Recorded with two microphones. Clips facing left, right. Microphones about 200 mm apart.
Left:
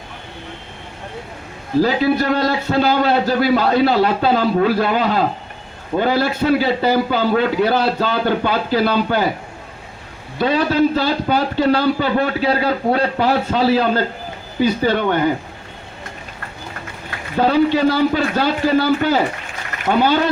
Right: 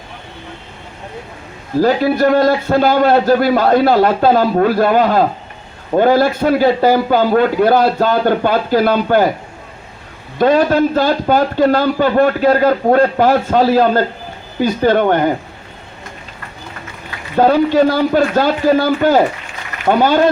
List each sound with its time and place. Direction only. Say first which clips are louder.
1.8 s a man's voice: right 4 dB; 50° right (ahead or behind)
10.3 s a man's voice: right 5 dB; 50° right (ahead or behind)
17.3 s a man's voice: right 4 dB; 45° right (ahead or behind)